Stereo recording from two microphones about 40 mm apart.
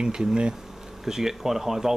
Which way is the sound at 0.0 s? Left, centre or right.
Centre.